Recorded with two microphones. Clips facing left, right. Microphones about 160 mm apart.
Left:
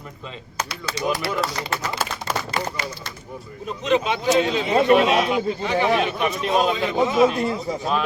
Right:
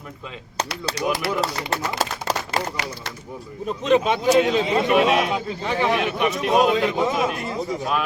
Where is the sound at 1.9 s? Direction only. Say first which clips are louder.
Right 2 dB; 40° right (ahead or behind).